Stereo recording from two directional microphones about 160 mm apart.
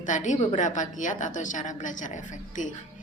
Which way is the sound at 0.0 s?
50° left (ahead or behind).